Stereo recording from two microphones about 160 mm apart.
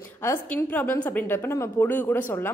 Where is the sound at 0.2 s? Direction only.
15° left (ahead or behind).